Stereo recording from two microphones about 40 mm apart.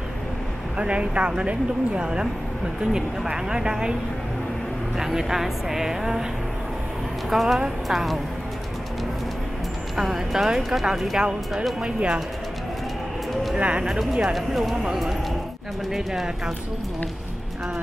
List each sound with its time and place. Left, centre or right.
0.7 s speech: right
4.9 s speech: centre
7.2 s speech: centre
9.9 s speech: centre; by 12.2 s right
13.6 s speech: right
14.3 s speech: centre